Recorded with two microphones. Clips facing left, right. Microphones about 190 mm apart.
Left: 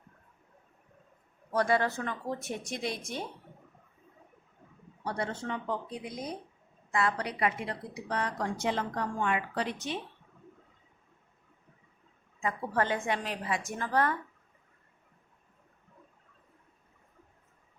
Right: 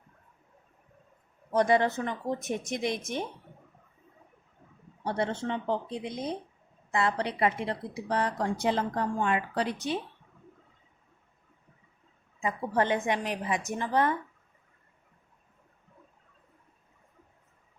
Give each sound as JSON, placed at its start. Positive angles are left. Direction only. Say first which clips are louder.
{"t": 1.5, "sound": "speech", "louder": "right 4 dB", "side_deg": -20}
{"t": 5.0, "sound": "a woman's voice", "louder": "right 4 dB", "side_deg": -25}
{"t": 12.4, "sound": "speech", "louder": "right 2 dB", "side_deg": -20}